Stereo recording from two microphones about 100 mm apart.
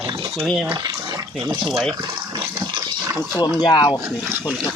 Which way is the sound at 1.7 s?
Centre (ahead or behind).